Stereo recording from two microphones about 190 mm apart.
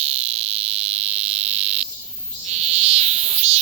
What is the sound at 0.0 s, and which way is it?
Fire alarm, 35° right (ahead or behind).